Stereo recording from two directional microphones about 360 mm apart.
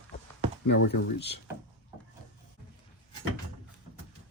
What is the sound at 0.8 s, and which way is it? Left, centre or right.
Speech, left.